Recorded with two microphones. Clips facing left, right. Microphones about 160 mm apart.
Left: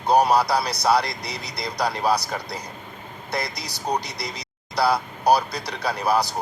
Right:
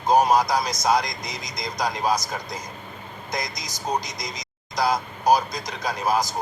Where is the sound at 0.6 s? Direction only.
65° left (ahead or behind).